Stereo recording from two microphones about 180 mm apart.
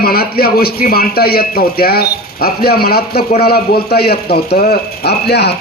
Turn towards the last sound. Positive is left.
turn(degrees=65)  # may be behind; listen again after turning